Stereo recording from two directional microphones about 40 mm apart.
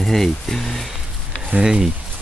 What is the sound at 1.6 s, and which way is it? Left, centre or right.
Speech, centre.